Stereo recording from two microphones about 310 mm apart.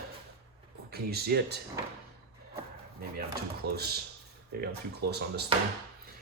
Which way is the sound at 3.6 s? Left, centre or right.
Right.